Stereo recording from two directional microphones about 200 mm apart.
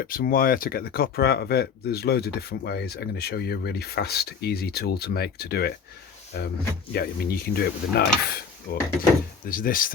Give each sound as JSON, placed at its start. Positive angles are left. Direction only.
{"t": 0.1, "sound": "speech", "side_deg": 45}